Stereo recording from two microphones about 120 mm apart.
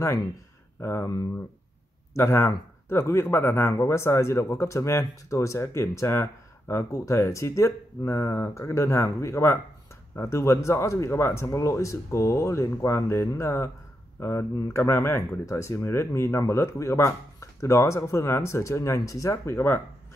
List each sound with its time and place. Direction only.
0.7 s speech: 20° left (ahead or behind)